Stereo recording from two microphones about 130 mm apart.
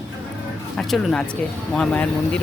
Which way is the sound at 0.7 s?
5° left (ahead or behind).